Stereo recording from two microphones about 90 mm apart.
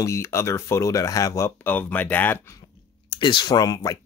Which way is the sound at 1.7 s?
20° left (ahead or behind).